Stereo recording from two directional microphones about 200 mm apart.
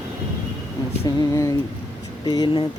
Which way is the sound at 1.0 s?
15° left (ahead or behind).